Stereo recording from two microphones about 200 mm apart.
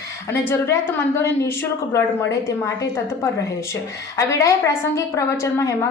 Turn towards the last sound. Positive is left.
turn(degrees=15)  # may be behind; listen again after turning